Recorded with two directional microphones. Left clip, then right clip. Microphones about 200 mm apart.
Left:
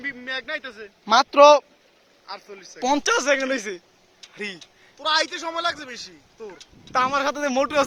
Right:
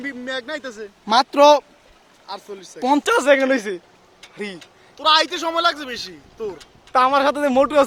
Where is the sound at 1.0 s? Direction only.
5° left (ahead or behind).